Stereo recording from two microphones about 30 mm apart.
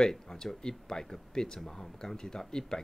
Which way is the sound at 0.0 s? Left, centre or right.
Centre.